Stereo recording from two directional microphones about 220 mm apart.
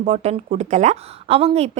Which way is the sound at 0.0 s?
30° right (ahead or behind).